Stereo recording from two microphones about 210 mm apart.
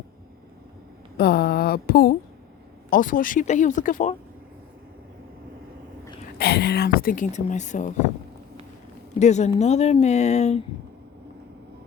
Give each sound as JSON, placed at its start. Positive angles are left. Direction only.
{"t": 1.1, "sound": "a sound", "side_deg": 45}
{"t": 2.9, "sound": "speech", "side_deg": 40}
{"t": 6.4, "sound": "speech", "side_deg": 50}
{"t": 9.1, "sound": "speech", "side_deg": 35}